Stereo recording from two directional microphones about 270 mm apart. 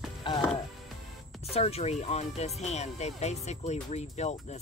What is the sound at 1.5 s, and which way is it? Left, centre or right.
Speech, left.